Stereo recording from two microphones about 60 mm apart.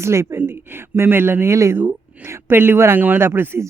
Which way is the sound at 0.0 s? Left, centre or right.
Right.